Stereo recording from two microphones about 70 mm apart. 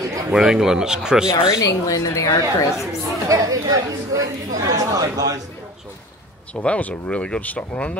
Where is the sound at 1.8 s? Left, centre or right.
Left.